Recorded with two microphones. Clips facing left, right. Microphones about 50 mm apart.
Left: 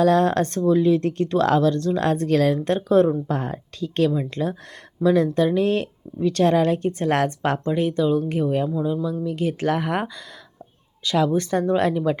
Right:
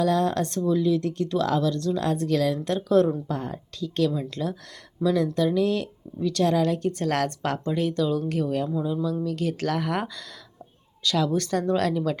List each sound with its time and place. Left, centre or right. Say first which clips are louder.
0.0 s speech: left 5 dB; left